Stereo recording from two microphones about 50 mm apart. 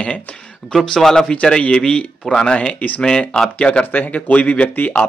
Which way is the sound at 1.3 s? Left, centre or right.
Left.